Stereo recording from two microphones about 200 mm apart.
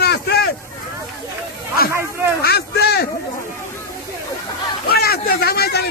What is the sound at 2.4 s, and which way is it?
Speech, 50° left (ahead or behind).